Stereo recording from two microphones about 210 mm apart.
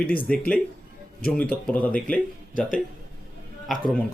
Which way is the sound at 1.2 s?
5° left (ahead or behind).